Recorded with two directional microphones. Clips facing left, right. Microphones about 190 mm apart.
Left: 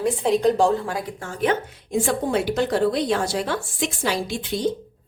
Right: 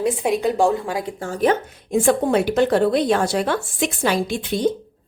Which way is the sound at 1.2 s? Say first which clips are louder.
Right 4 dB; 40° right (ahead or behind).